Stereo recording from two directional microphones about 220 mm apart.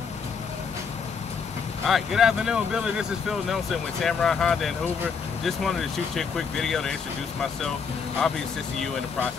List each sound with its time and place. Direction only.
1.9 s speech: centre (ahead or behind)